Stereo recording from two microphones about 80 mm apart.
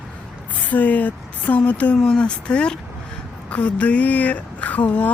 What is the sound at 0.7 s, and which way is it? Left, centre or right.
Speech, centre.